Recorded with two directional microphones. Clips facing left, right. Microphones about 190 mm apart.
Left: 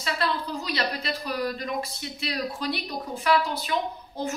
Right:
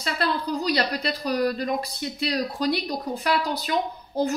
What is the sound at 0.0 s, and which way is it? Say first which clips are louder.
Speech: right 2 dB; 40° right (ahead or behind).